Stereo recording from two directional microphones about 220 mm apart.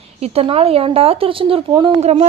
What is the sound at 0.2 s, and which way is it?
A woman's voice, 25° right (ahead or behind).